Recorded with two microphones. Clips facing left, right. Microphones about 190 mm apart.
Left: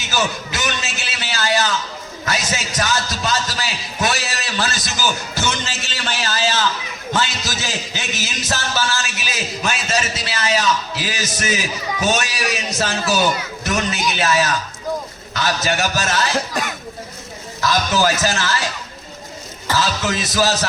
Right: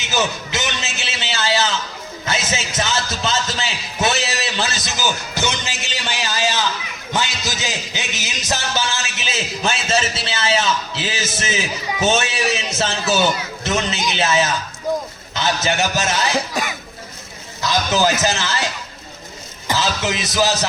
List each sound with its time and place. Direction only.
0.0 s a sound: 20° right (ahead or behind)
2.2 s a man's voice: 25° right (ahead or behind)
17.6 s a man's voice: 20° right (ahead or behind)